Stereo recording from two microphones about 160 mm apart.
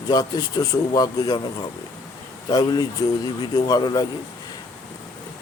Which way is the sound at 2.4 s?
25° left (ahead or behind).